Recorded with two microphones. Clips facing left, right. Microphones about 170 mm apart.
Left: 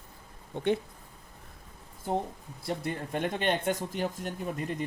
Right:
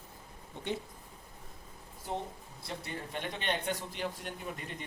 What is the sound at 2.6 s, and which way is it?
Speech, 50° left (ahead or behind).